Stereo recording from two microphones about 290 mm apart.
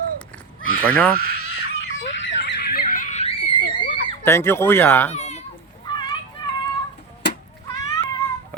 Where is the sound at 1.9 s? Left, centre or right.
Left.